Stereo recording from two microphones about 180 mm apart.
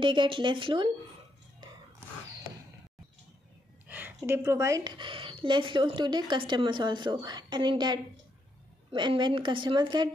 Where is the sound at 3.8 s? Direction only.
10° right (ahead or behind).